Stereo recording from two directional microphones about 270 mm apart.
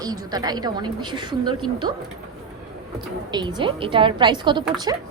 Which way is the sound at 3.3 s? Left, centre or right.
Centre.